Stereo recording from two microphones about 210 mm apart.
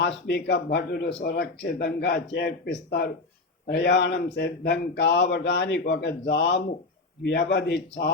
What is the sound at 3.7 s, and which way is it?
Speech, 55° left (ahead or behind).